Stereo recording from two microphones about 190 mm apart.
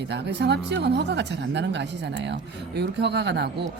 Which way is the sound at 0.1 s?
65° right (ahead or behind).